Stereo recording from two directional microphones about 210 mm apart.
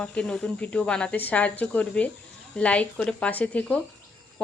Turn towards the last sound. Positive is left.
turn(degrees=5)  # may be behind; listen again after turning